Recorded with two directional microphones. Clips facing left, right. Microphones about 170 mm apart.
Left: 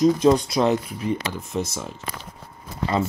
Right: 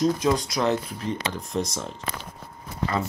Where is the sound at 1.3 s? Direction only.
5° left (ahead or behind).